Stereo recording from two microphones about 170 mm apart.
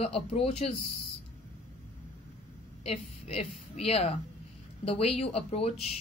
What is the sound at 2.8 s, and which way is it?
A woman's voice, 35° left (ahead or behind).